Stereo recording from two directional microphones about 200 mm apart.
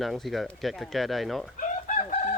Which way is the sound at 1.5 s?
40° left (ahead or behind).